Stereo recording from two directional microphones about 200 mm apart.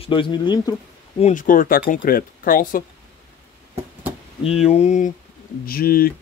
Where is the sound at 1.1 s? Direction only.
35° left (ahead or behind).